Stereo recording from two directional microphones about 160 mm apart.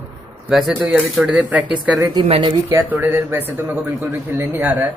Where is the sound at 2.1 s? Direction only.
30° right (ahead or behind).